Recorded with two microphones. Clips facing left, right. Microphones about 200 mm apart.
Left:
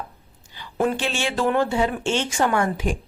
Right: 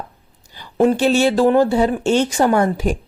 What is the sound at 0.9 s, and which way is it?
Speech, 40° right (ahead or behind).